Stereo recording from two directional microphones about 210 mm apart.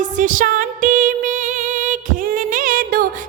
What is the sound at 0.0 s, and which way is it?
Music, 40° right (ahead or behind).